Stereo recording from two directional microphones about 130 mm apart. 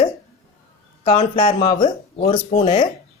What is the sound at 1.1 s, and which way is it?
A woman's voice, 45° left (ahead or behind).